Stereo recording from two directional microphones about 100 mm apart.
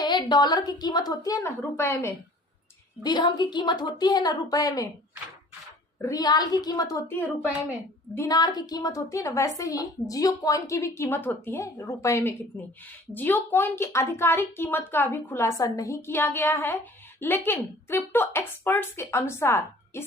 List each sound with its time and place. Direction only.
0.0 s a woman's voice: 50° left (ahead or behind); by 2.1 s 25° left (ahead or behind)
3.0 s a woman's voice: 50° left (ahead or behind)
6.0 s a woman's voice: 35° left (ahead or behind)
8.3 s a woman's voice: 40° left (ahead or behind); by 20.1 s 25° left (ahead or behind)